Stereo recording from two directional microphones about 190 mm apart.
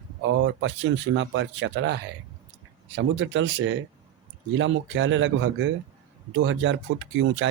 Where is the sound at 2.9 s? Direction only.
85° right.